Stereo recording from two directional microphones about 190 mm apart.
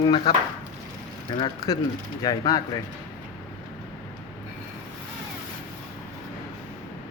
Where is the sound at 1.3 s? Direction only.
25° left (ahead or behind).